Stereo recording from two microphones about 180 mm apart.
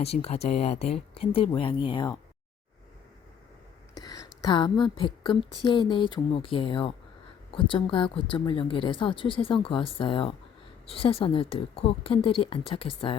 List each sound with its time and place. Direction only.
0.0 s a woman's voice: 35° left (ahead or behind)
3.9 s a woman's voice: 20° left (ahead or behind)